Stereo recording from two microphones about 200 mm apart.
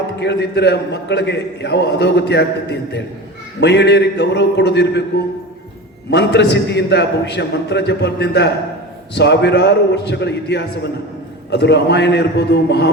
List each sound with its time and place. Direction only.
0.2 s a man's voice: 60° left (ahead or behind)
6.1 s a man's voice: 60° left (ahead or behind)